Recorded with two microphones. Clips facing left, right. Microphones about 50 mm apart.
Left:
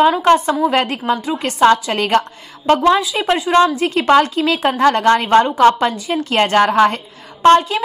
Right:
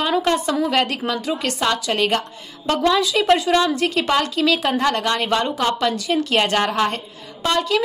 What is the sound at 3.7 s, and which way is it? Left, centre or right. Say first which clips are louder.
A woman's voice: left 6 dB; left.